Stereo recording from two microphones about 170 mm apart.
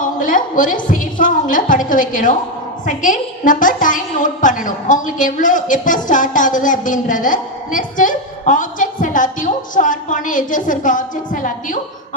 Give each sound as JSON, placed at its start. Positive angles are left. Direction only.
{"t": 0.0, "sound": "a woman's voice", "side_deg": 50}